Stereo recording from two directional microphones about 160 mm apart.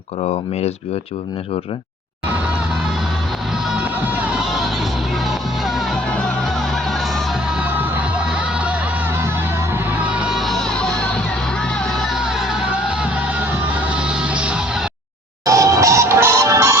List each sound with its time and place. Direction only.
3.7 s music: 10° right (ahead or behind)
7.6 s music: 10° right (ahead or behind)
9.7 s music: 10° right (ahead or behind)
15.4 s music: 20° right (ahead or behind)